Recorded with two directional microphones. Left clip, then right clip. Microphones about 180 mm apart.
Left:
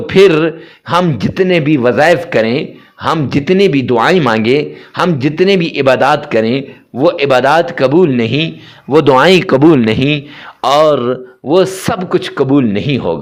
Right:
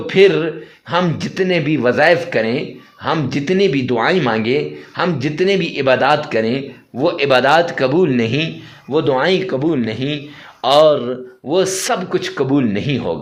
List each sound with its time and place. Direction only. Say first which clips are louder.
0.1 s speech: left 4 dB; 30° left (ahead or behind)
8.9 s a man's voice: left 8 dB; 35° left (ahead or behind)